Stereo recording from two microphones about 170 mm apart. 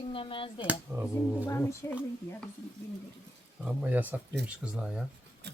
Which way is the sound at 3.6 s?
10° right (ahead or behind).